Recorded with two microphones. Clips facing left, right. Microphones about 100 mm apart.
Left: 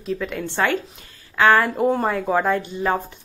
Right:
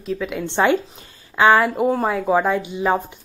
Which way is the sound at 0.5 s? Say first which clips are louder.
Right 5 dB; 20° right (ahead or behind).